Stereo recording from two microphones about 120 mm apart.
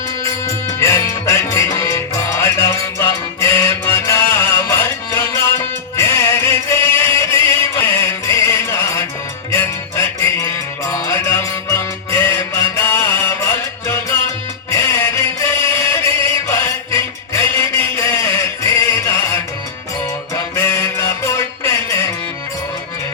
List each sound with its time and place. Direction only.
0.4 s music: 25° left (ahead or behind)